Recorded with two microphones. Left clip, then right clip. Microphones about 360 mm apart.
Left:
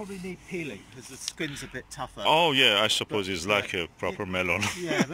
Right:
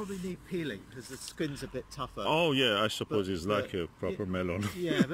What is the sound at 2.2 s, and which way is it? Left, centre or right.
Speech, centre.